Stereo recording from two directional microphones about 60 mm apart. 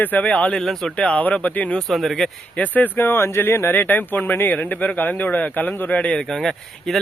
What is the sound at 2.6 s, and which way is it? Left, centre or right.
Speech, left.